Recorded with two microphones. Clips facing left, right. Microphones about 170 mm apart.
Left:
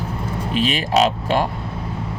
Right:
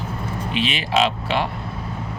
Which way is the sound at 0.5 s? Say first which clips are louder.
Left 3 dB; 40° left (ahead or behind).